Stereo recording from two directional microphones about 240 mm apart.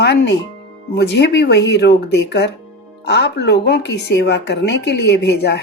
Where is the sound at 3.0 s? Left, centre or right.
Left.